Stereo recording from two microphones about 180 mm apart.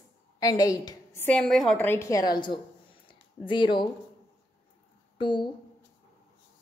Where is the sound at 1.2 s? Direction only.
5° left (ahead or behind); by 3.8 s 25° left (ahead or behind).